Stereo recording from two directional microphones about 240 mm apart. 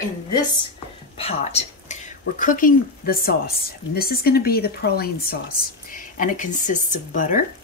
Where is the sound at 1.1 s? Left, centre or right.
Left.